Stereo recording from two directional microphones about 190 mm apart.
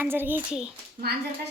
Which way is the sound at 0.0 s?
10° right (ahead or behind).